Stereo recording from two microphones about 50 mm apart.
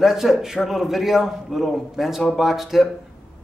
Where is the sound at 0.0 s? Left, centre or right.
Centre.